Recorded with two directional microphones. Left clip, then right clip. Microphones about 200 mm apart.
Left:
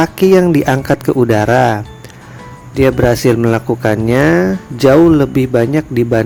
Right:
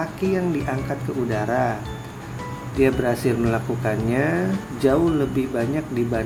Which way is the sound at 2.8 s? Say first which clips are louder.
Left 9 dB; 55° left (ahead or behind).